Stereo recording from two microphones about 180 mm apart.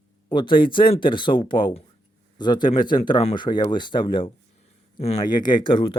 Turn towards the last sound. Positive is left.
turn(degrees=25)  # may be behind; listen again after turning